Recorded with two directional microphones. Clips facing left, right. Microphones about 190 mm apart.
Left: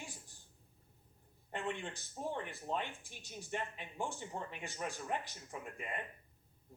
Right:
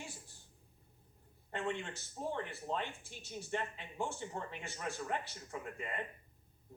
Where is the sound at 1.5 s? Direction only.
15° left (ahead or behind).